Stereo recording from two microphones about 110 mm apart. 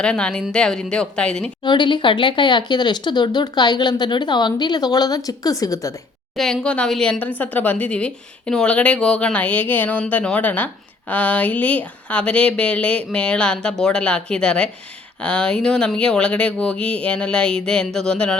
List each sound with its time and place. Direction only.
0.0 s speech: 10° left (ahead or behind)
1.6 s speech: 45° left (ahead or behind)
6.3 s speech: 5° left (ahead or behind)